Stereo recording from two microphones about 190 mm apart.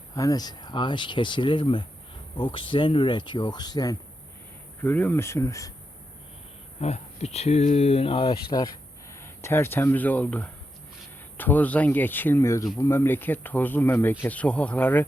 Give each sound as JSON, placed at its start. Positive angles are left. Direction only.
{"t": 0.2, "sound": "speech", "side_deg": 20}
{"t": 4.8, "sound": "speech", "side_deg": 10}
{"t": 6.7, "sound": "speech", "side_deg": 35}